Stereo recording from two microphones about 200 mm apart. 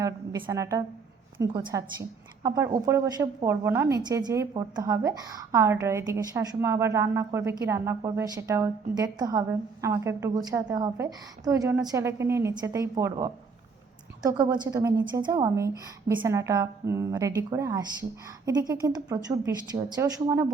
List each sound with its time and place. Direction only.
0.0 s a woman's voice: 15° right (ahead or behind)